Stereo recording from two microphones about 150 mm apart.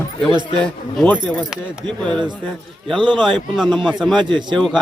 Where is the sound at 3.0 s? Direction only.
35° right (ahead or behind).